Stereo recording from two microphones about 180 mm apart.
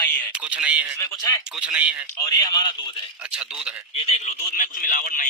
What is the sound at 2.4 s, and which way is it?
Speech, 20° left (ahead or behind).